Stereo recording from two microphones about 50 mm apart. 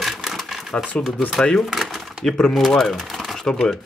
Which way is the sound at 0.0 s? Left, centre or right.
Centre.